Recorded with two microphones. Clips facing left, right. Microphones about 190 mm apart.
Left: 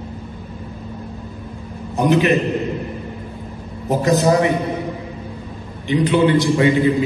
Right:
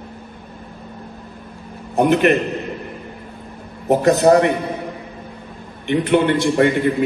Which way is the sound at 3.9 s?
65° right (ahead or behind).